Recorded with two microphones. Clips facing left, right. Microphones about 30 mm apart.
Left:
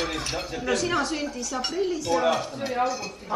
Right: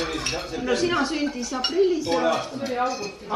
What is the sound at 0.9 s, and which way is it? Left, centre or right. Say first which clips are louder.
Speech: right 2 dB; centre.